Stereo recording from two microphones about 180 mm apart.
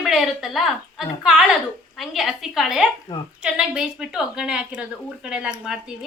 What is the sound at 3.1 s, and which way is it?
Speech, 20° left (ahead or behind).